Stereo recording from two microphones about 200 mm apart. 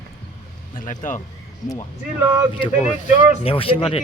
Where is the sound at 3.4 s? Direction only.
30° left (ahead or behind).